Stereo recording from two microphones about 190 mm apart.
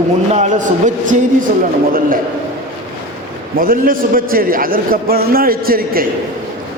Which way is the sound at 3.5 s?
50° right (ahead or behind).